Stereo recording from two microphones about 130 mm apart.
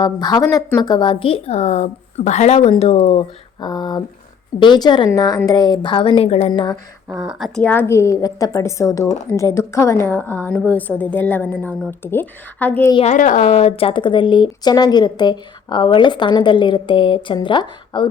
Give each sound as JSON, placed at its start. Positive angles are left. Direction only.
{"t": 0.0, "sound": "a woman's voice", "side_deg": 30}
{"t": 3.6, "sound": "speech", "side_deg": 35}
{"t": 7.3, "sound": "a woman's voice", "side_deg": 0}
{"t": 7.6, "sound": "a woman's voice", "side_deg": 15}
{"t": 13.1, "sound": "speech", "side_deg": 80}
{"t": 13.5, "sound": "speech", "side_deg": 50}